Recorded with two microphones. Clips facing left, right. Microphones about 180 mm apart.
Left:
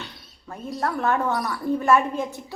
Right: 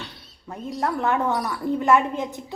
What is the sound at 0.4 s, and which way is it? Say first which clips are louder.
A woman's voice: right 1 dB; 20° right (ahead or behind).